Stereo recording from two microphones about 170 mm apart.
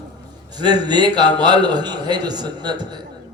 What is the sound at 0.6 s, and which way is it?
A man's voice, 25° right (ahead or behind).